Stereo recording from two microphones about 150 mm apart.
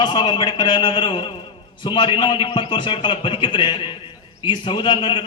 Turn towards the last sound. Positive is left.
turn(degrees=30)  # may be behind; listen again after turning